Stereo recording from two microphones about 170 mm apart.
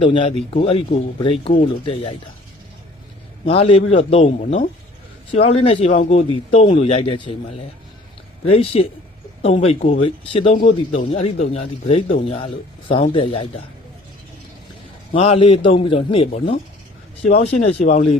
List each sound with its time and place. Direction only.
0.0 s a man's voice: 30° left (ahead or behind)
3.4 s a man's voice: 35° left (ahead or behind)
8.4 s a man's voice: 35° left (ahead or behind)
15.1 s a man's voice: 35° left (ahead or behind)